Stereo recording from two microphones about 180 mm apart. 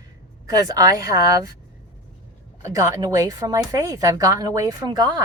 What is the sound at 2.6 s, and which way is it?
A woman's voice, 15° right (ahead or behind).